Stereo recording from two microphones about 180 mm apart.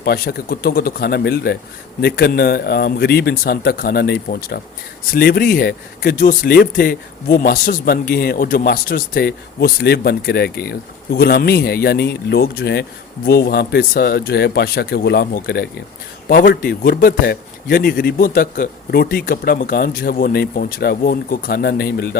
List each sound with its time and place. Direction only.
0.0 s speech: 60° left (ahead or behind)
16.3 s speech: 50° left (ahead or behind)